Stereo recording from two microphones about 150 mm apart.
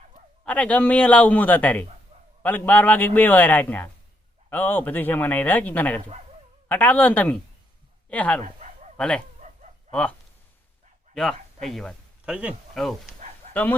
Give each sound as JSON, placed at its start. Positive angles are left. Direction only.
{"t": 0.4, "sound": "speech", "side_deg": 10}
{"t": 9.4, "sound": "a sound", "side_deg": -55}
{"t": 9.9, "sound": "speech", "side_deg": 10}
{"t": 13.5, "sound": "speech", "side_deg": 10}